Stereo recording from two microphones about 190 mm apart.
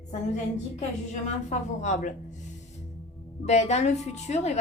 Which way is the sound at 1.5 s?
40° left (ahead or behind).